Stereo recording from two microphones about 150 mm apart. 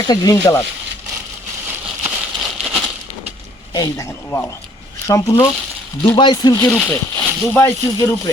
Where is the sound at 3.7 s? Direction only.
20° left (ahead or behind).